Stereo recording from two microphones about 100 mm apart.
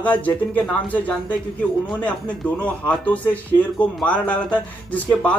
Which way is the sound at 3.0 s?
15° left (ahead or behind).